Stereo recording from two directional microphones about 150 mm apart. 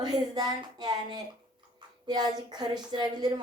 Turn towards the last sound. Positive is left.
turn(degrees=-25)  # may be behind; listen again after turning